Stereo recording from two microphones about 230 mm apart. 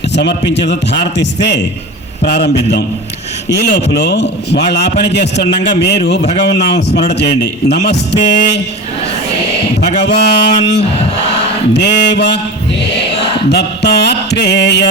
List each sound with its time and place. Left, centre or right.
0.1 s a man's voice: left
3.5 s a man's voice: left
10.0 s a man's voice: left